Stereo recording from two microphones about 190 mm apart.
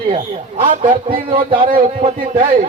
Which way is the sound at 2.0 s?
35° right (ahead or behind).